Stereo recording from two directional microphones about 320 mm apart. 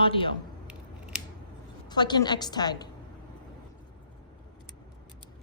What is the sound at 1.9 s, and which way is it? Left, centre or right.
Speech, centre.